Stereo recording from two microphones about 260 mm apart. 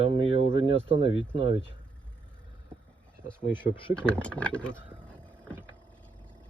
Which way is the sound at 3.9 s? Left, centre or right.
Centre.